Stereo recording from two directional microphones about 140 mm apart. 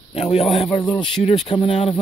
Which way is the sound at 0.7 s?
35° left (ahead or behind).